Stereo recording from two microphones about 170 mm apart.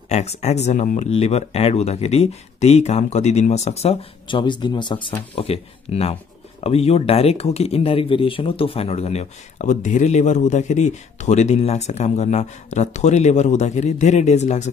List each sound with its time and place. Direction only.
0.1 s speech: 40° left (ahead or behind)